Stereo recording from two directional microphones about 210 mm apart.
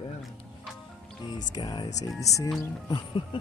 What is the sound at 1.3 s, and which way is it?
Speech, 20° left (ahead or behind).